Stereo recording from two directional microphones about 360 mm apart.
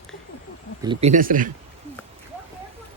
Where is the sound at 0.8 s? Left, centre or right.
Centre.